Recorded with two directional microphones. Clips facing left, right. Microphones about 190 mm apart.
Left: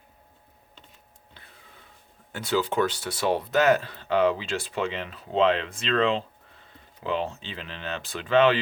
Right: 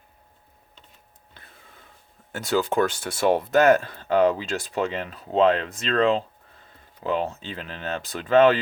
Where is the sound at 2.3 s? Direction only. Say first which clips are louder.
Right 2 dB; 45° right (ahead or behind).